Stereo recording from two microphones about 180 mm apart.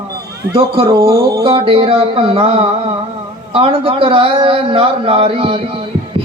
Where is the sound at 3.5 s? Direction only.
30° right (ahead or behind).